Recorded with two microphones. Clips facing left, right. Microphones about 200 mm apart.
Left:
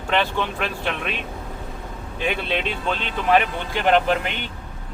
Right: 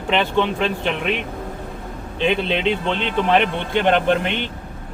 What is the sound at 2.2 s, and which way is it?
Speech, 20° right (ahead or behind).